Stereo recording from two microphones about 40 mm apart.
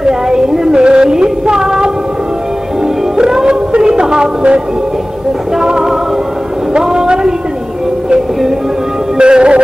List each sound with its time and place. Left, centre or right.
0.0 s a sound: centre
0.8 s music: centre
3.2 s music: centre
5.6 s music: centre
6.8 s a sound: centre
9.2 s music: right